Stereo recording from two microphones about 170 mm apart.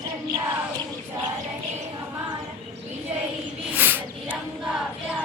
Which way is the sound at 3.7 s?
10° right (ahead or behind).